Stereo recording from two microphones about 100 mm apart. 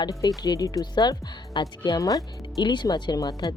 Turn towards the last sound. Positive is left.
turn(degrees=40)  # may be behind; listen again after turning